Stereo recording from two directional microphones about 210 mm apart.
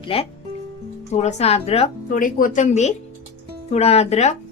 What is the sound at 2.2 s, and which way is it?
Speech, 40° left (ahead or behind).